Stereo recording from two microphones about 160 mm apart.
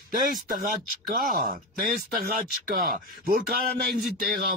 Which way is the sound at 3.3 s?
75° right (ahead or behind).